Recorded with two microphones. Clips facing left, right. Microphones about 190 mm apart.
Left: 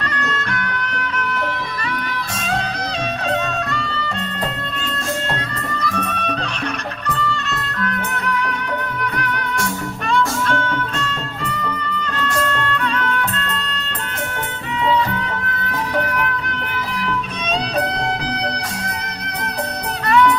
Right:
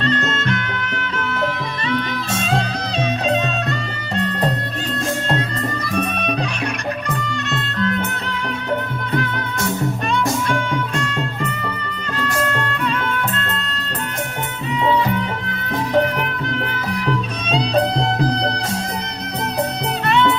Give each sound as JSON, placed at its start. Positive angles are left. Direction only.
{"t": 0.0, "sound": "music", "side_deg": -25}
{"t": 3.2, "sound": "music", "side_deg": -20}
{"t": 6.1, "sound": "music", "side_deg": -15}
{"t": 7.8, "sound": "music", "side_deg": -25}
{"t": 10.2, "sound": "music", "side_deg": -15}
{"t": 12.4, "sound": "music", "side_deg": -10}
{"t": 20.1, "sound": "music", "side_deg": -25}